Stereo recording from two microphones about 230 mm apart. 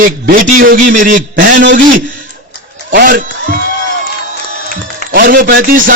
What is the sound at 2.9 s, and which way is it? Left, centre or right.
Speech, right.